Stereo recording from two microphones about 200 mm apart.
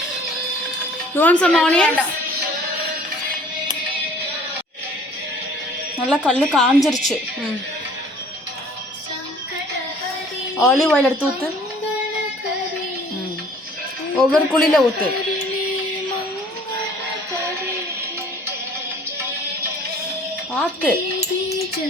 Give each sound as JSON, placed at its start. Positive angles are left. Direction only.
{"t": 1.1, "sound": "speech", "side_deg": 10}
{"t": 6.0, "sound": "speech", "side_deg": 0}
{"t": 10.6, "sound": "speech", "side_deg": 0}
{"t": 14.2, "sound": "speech", "side_deg": 5}
{"t": 20.5, "sound": "speech", "side_deg": 5}